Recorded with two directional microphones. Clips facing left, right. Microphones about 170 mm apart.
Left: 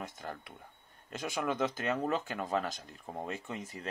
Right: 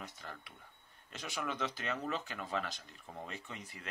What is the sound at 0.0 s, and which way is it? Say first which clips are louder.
Speech: left 6 dB; 45° left (ahead or behind).